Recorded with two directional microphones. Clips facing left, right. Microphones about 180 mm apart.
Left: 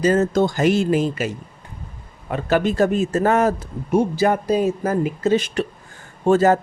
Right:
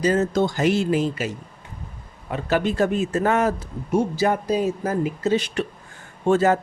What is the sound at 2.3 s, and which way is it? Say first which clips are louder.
Speech: left 3 dB; 45° left (ahead or behind).